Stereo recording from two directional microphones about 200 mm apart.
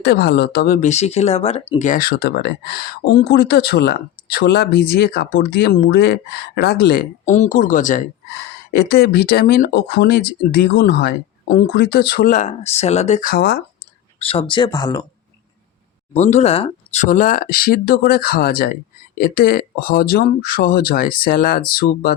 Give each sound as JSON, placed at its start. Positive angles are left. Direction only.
{"t": 0.0, "sound": "speech", "side_deg": 50}
{"t": 0.8, "sound": "speech", "side_deg": 35}
{"t": 7.3, "sound": "speech", "side_deg": 35}
{"t": 8.7, "sound": "speech", "side_deg": 50}
{"t": 14.2, "sound": "speech", "side_deg": 25}
{"t": 16.1, "sound": "speech", "side_deg": 35}